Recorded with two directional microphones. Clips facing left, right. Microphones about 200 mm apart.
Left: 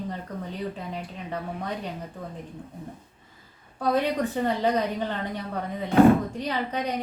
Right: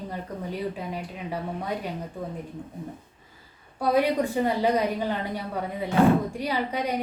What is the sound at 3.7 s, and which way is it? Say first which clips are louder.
A woman's voice: right 2 dB; 10° right (ahead or behind).